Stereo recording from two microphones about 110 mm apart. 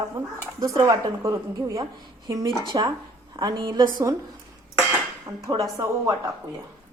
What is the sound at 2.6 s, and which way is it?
Speech, 45° right (ahead or behind).